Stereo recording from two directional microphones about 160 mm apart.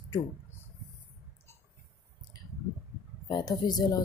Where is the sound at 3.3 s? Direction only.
25° left (ahead or behind).